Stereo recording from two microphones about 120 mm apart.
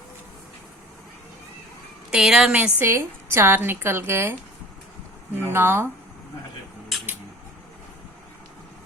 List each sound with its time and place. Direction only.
2.1 s a woman's voice: 5° right (ahead or behind); by 4.4 s 20° right (ahead or behind)
5.5 s a woman's voice: 20° right (ahead or behind)